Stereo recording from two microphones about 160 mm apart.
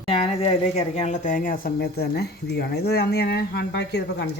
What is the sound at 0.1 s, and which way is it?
Speech, 40° left (ahead or behind).